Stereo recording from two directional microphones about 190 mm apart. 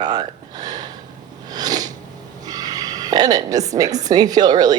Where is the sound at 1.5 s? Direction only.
20° right (ahead or behind).